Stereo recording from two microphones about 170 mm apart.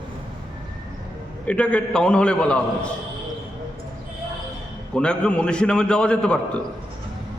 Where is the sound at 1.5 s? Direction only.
5° left (ahead or behind).